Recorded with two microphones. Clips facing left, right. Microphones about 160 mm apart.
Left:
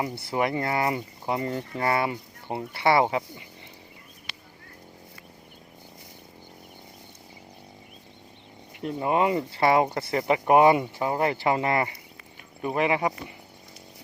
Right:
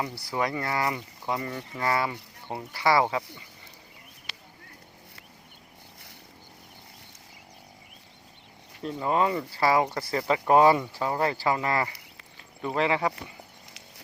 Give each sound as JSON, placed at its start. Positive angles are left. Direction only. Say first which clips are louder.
{"t": 0.0, "sound": "speech", "louder": "left 3 dB", "side_deg": 25}
{"t": 8.8, "sound": "speech", "louder": "left 2 dB", "side_deg": 15}